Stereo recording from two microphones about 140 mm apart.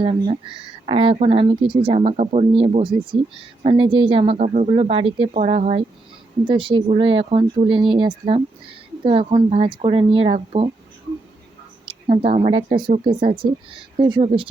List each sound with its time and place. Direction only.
0.0 s speech: 40° right (ahead or behind)
4.4 s speech: 55° right (ahead or behind)
4.7 s speech: 40° right (ahead or behind)
5.3 s speech: 65° right (ahead or behind)
6.4 s speech: 35° right (ahead or behind)
12.0 s speech: 45° right (ahead or behind)